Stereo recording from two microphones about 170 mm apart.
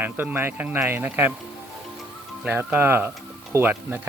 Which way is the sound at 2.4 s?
10° right (ahead or behind).